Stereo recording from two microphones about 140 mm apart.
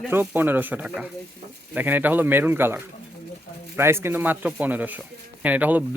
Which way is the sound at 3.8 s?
15° right (ahead or behind).